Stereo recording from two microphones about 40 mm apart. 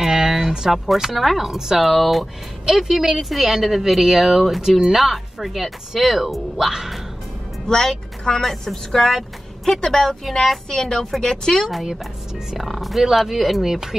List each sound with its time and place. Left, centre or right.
0.0 s a sound: centre
0.7 s speech: centre
7.6 s a woman's voice: centre
12.4 s speech: centre